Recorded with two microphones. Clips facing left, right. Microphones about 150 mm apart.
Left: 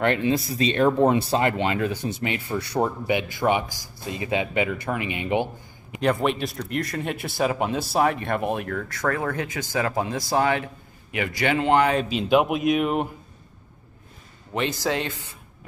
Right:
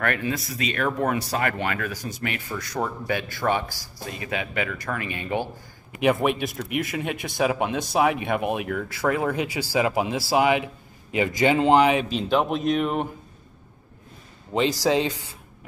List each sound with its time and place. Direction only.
0.0 s speech: 25° left (ahead or behind)
3.1 s speech: 20° left (ahead or behind)
5.9 s a man's voice: 5° right (ahead or behind)
12.1 s speech: 5° left (ahead or behind)
14.8 s a man's voice: 15° right (ahead or behind)